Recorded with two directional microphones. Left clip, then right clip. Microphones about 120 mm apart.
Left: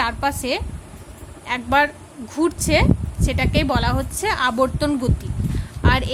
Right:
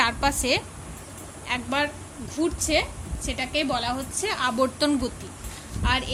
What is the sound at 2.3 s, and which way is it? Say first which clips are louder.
A woman's voice: left 5 dB; 50° left (ahead or behind).